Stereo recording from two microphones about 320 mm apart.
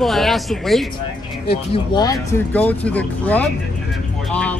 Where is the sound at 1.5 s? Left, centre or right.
Centre.